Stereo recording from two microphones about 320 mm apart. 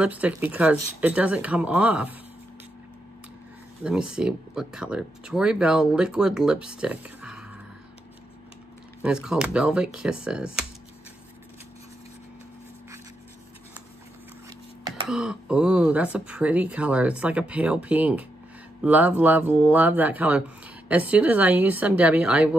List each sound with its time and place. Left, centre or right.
0.0 s speech: centre
3.8 s speech: centre
9.0 s speech: centre
15.0 s speech: centre